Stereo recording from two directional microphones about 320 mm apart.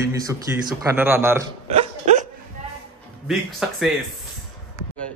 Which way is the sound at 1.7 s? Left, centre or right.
Right.